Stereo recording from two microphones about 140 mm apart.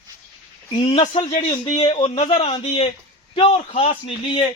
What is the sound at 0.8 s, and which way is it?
A man's voice, 40° left (ahead or behind).